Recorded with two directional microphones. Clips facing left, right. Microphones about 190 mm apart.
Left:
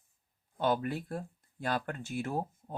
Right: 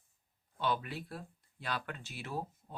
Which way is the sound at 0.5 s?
45° left (ahead or behind).